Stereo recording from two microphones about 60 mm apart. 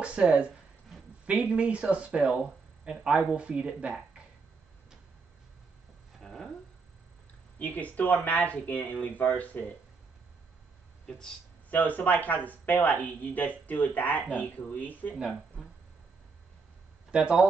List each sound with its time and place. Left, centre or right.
0.0 s speech: right
6.1 s a sound: centre
7.5 s speech: left
11.1 s speech: centre
11.7 s speech: left
17.1 s speech: centre